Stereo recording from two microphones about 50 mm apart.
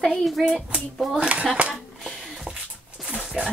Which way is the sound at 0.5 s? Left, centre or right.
Centre.